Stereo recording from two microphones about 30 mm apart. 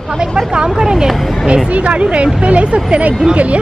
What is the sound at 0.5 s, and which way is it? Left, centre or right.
Speech, right.